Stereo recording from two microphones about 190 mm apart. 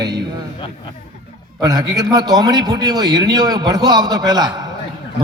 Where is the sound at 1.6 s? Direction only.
20° right (ahead or behind).